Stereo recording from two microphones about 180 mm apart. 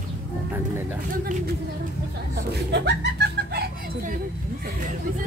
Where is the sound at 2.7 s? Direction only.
70° right (ahead or behind).